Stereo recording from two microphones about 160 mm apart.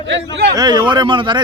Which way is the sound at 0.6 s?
25° right (ahead or behind).